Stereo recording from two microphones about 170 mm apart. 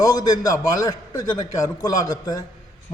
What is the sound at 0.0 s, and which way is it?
Speech, 20° left (ahead or behind).